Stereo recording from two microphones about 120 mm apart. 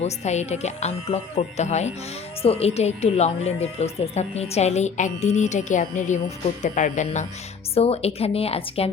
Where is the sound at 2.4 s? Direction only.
55° left (ahead or behind); by 7.3 s 80° left.